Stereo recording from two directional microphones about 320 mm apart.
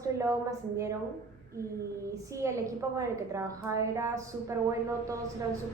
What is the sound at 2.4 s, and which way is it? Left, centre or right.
A woman's voice, centre.